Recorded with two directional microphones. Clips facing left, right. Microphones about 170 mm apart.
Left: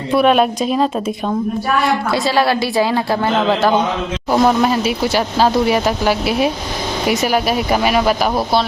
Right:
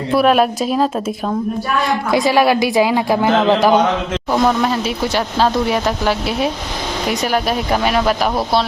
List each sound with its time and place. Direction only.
0.1 s speech: centre (ahead or behind)
1.8 s a man's voice: 15° right (ahead or behind)
4.3 s speech: 5° left (ahead or behind)